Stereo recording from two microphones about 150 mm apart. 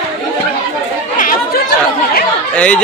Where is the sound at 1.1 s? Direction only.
70° left (ahead or behind).